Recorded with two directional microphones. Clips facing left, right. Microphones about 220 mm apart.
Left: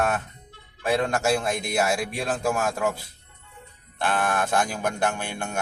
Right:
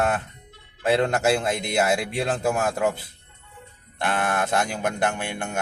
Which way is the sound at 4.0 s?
20° right (ahead or behind).